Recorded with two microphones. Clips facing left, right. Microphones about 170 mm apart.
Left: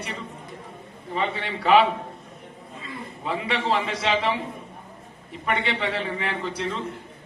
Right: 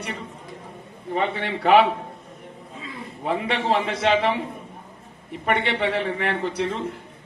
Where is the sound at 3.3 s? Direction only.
60° right (ahead or behind).